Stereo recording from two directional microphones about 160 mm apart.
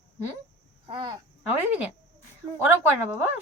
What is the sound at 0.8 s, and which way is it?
Child singing, 30° right (ahead or behind).